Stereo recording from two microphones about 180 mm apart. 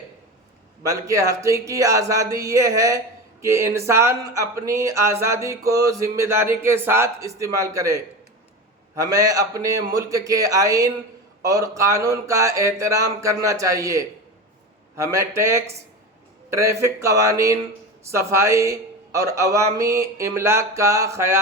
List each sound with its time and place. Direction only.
0.9 s a man's voice: 15° right (ahead or behind)